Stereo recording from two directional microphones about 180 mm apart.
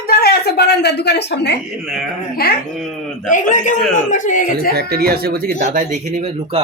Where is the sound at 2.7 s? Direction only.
Centre (ahead or behind).